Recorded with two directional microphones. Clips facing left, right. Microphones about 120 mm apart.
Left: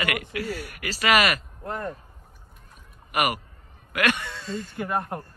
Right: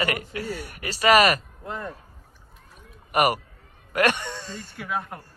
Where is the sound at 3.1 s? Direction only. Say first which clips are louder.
Right 4 dB; 35° right (ahead or behind).